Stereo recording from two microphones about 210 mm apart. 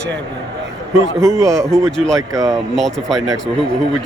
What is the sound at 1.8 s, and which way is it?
Speech, centre (ahead or behind).